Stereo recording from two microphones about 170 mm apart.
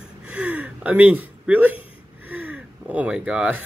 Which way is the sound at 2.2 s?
10° right (ahead or behind).